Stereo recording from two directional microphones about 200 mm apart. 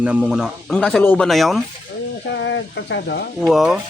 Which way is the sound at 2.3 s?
65° left (ahead or behind).